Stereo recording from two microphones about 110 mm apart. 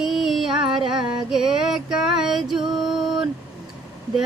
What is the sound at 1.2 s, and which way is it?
Music, 5° right (ahead or behind).